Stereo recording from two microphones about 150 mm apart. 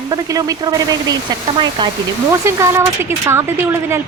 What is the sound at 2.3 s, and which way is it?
Speech, 20° right (ahead or behind).